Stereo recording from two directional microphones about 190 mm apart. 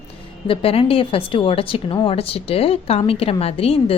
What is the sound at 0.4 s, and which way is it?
A woman's voice, 30° left (ahead or behind).